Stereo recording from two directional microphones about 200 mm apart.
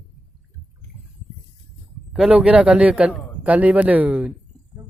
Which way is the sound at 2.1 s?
Centre (ahead or behind).